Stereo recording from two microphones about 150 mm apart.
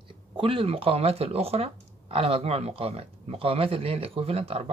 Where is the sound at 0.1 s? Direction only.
35° right (ahead or behind).